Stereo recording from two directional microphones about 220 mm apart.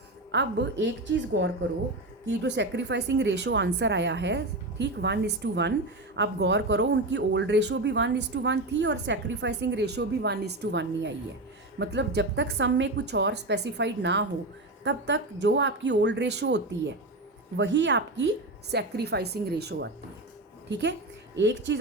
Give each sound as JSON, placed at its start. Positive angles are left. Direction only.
{"t": 0.3, "sound": "speech", "side_deg": -55}
{"t": 2.4, "sound": "a woman's voice", "side_deg": -55}